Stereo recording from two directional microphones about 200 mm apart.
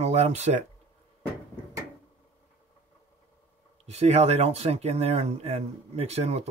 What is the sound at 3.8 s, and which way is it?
Speech, 30° right (ahead or behind).